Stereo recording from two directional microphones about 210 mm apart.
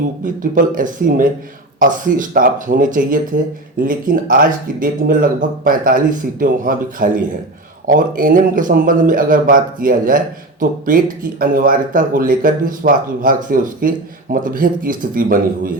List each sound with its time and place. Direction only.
0.5 s a man's voice: 40° right (ahead or behind)